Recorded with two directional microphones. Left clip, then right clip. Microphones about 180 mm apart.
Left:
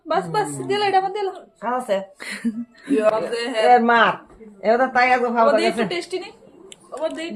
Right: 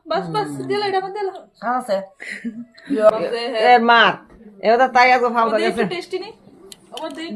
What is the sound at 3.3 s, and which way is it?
Speech, 70° left (ahead or behind).